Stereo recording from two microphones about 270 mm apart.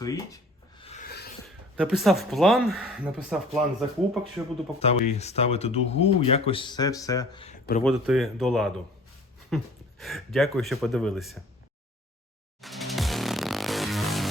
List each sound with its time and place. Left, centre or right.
0.0 s rub: centre
1.0 s filing: left
1.7 s speech: centre
4.8 s speech: left
7.9 s speech: centre
12.6 s music: centre